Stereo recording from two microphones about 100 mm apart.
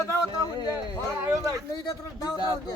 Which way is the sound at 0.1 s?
40° left (ahead or behind).